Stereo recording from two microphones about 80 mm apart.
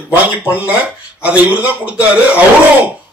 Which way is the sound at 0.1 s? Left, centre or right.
Centre.